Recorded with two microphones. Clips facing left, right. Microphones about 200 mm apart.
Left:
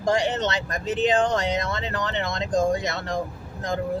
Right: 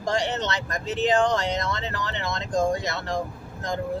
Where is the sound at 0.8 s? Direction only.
20° left (ahead or behind).